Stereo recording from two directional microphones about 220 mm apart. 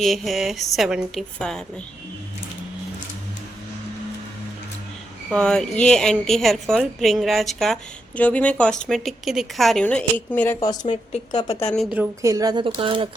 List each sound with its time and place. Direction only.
0.0 s a woman's voice: centre (ahead or behind)
5.3 s a woman's voice: 5° left (ahead or behind)
11.7 s a woman's voice: centre (ahead or behind)
12.2 s speech: 15° right (ahead or behind)